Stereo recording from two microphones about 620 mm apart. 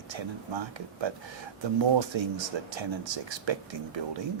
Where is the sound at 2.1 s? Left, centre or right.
Right.